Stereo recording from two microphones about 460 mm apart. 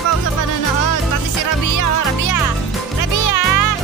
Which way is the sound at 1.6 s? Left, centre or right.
Left.